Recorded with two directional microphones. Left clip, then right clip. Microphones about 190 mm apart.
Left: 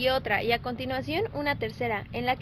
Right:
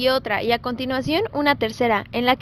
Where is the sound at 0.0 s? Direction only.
45° right (ahead or behind).